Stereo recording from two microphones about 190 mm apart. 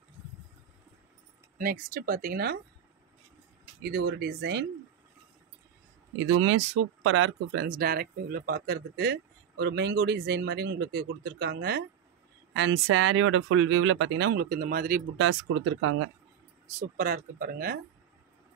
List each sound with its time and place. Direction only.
1.6 s speech: 50° right (ahead or behind)
3.8 s speech: 55° right (ahead or behind)
6.1 s speech: 90° right
7.6 s speech: 50° right (ahead or behind)
12.5 s speech: 75° right (ahead or behind); by 15.0 s 50° right (ahead or behind)
15.1 s speech: 90° right
16.7 s speech: 45° right (ahead or behind)